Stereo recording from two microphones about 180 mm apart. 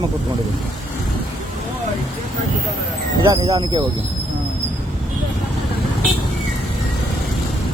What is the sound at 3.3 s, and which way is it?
Speech, 30° right (ahead or behind).